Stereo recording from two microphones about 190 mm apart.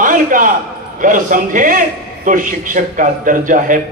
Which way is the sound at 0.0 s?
45° right (ahead or behind).